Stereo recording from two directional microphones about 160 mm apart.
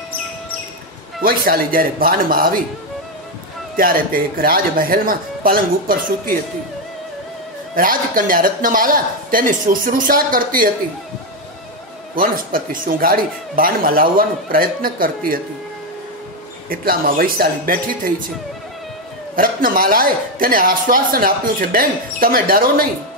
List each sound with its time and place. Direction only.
1.2 s speech: 65° right (ahead or behind)
3.7 s speech: 65° right (ahead or behind)
7.7 s speech: 60° right (ahead or behind)
12.2 s speech: 60° right (ahead or behind)
16.6 s speech: 65° right (ahead or behind)
19.3 s speech: 60° right (ahead or behind)